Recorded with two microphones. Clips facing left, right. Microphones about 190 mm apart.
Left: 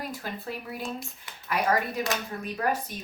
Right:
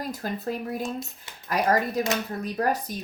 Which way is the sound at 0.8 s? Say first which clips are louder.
Right 4 dB; 25° right (ahead or behind).